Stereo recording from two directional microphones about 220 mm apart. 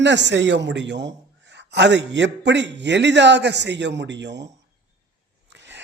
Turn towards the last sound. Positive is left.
turn(degrees=-55)  # may be behind; listen again after turning